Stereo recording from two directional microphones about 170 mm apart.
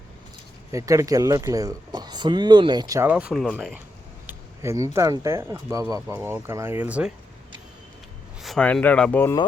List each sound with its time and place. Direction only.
0.7 s speech: 20° right (ahead or behind)
3.1 s speech: 5° right (ahead or behind)
4.6 s speech: 15° right (ahead or behind)
8.4 s speech: centre (ahead or behind)